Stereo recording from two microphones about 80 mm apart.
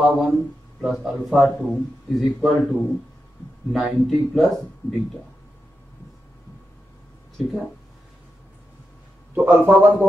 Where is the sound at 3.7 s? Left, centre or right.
Centre.